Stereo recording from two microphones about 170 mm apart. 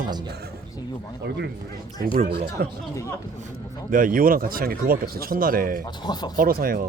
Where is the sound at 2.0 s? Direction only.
55° right (ahead or behind).